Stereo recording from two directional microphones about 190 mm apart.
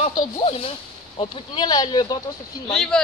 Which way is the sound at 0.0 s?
35° left (ahead or behind).